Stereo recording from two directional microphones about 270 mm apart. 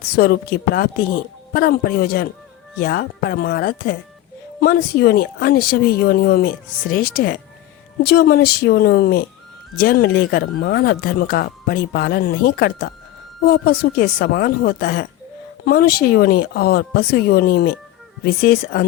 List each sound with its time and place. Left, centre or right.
0.1 s speech: left